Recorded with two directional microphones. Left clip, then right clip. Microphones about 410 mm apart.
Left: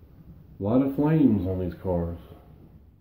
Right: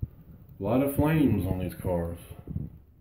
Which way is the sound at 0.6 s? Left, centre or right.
Centre.